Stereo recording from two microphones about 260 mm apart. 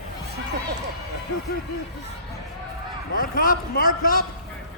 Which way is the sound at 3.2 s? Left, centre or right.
Left.